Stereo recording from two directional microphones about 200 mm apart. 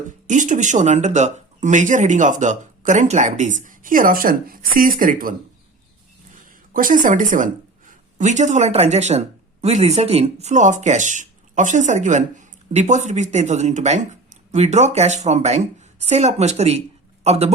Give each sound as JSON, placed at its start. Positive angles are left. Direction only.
{"t": 0.3, "sound": "speech", "side_deg": -40}
{"t": 6.3, "sound": "speech", "side_deg": -40}